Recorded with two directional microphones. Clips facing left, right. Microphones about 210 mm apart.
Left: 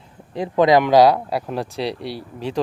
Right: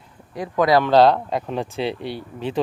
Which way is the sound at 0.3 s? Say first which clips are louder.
Left 3 dB; 25° left (ahead or behind).